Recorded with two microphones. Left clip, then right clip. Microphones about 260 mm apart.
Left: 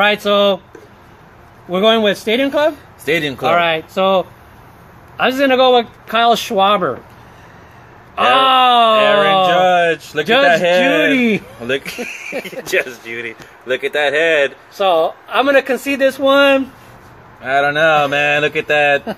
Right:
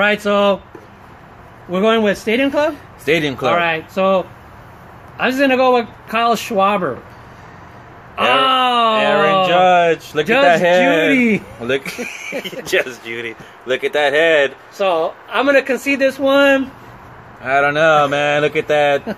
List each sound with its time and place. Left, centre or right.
0.0 s speech: centre
1.7 s speech: centre
3.1 s speech: centre
3.4 s speech: centre
8.2 s speech: centre
9.0 s speech: centre
11.1 s speech: centre
11.6 s speech: centre
14.8 s speech: centre
17.4 s speech: centre